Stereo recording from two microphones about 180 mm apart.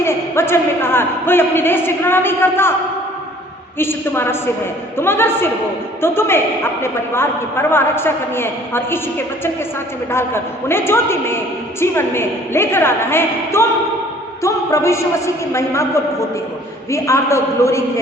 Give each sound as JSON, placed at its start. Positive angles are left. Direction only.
{"t": 0.0, "sound": "a man's voice", "side_deg": 15}
{"t": 3.8, "sound": "a man's voice", "side_deg": 15}
{"t": 16.9, "sound": "a man's voice", "side_deg": 15}